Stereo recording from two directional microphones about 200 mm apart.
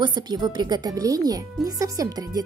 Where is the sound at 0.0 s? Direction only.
20° right (ahead or behind).